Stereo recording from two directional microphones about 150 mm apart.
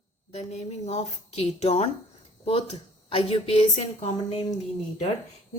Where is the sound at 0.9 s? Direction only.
45° left (ahead or behind).